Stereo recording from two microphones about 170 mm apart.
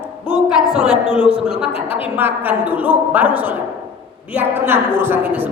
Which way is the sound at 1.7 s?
35° left (ahead or behind).